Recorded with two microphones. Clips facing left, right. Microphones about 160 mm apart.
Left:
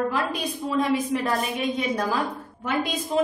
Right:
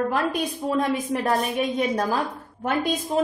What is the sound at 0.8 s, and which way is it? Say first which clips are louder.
Speech: left 3 dB; 45° right (ahead or behind).